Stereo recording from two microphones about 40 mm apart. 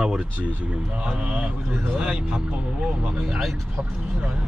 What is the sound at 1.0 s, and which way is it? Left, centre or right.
Speech, right.